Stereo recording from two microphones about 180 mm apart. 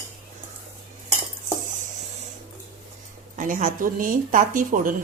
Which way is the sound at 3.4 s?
45° right (ahead or behind).